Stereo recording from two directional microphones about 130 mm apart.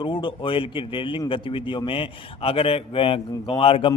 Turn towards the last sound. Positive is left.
turn(degrees=45)  # may be behind; listen again after turning